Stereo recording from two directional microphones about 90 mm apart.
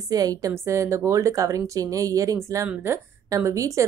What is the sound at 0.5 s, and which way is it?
Speech, 30° right (ahead or behind).